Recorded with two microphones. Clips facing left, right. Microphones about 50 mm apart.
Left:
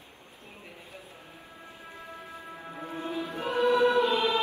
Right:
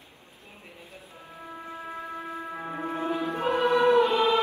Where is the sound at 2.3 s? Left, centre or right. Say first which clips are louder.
Right 7 dB; right.